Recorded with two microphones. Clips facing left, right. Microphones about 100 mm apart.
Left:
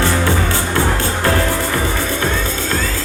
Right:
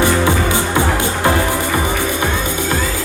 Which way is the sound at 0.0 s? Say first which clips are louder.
Right 2 dB; 15° right (ahead or behind).